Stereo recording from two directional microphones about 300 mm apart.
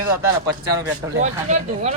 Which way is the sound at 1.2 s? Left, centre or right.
Right.